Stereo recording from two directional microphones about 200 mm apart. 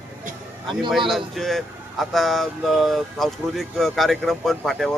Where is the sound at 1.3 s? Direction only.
Centre (ahead or behind).